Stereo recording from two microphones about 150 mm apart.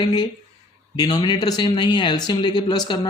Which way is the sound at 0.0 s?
25° left (ahead or behind).